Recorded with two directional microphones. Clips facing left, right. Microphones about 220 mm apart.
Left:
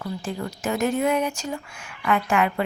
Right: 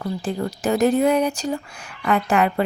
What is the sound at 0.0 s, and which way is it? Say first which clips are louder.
Speech: right 5 dB; 35° right (ahead or behind).